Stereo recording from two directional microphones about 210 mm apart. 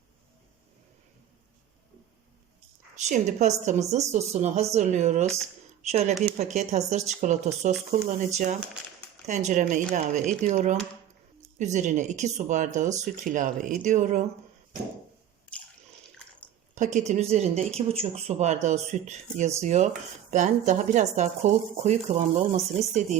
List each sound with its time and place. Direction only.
2.9 s speech: 35° right (ahead or behind)
16.7 s a woman's voice: 35° right (ahead or behind)